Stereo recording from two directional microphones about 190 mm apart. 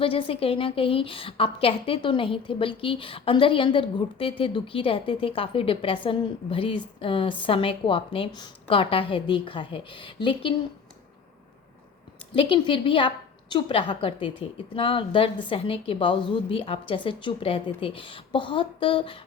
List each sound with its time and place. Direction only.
0.0 s a woman's voice: 30° left (ahead or behind)
12.3 s a woman's voice: 25° left (ahead or behind)